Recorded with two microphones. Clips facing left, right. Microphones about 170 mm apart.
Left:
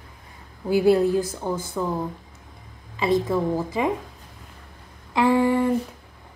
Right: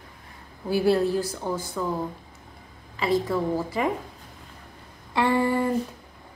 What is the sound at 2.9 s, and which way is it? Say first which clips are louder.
Speech: left 2 dB; 20° left (ahead or behind).